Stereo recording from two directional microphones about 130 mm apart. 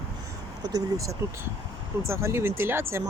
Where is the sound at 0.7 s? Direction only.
25° right (ahead or behind).